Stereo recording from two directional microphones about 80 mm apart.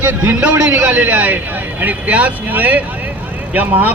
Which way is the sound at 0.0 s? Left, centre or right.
Right.